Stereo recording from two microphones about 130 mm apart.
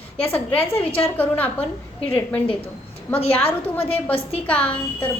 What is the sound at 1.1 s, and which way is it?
Speech, 15° left (ahead or behind).